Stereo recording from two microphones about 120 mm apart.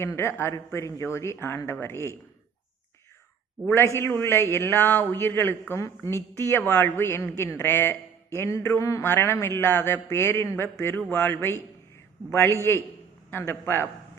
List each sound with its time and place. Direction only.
0.0 s a woman's voice: 20° left (ahead or behind)
3.7 s a woman's voice: 20° left (ahead or behind)